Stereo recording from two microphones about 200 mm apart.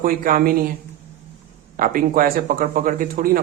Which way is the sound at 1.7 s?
45° right (ahead or behind).